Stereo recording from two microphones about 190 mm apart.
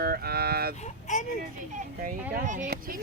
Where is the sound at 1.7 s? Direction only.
45° right (ahead or behind).